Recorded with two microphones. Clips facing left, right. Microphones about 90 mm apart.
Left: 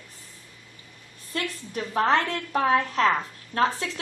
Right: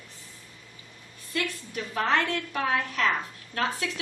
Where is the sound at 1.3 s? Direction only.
35° left (ahead or behind).